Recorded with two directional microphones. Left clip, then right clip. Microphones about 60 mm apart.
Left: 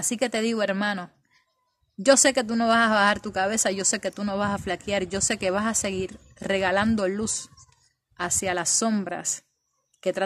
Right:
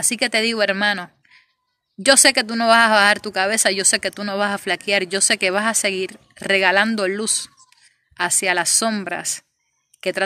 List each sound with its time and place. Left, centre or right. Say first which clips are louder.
0.0 s speech: right 7 dB; left
2.0 s speech: right 5 dB; left
8.6 s a woman's voice: right 5 dB; left
9.9 s a sound: right 4 dB; left